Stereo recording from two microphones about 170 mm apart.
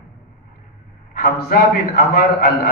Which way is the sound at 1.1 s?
60° left (ahead or behind).